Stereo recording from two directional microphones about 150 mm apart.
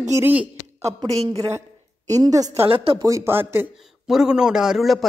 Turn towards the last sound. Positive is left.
turn(degrees=0)  # may be behind; listen again after turning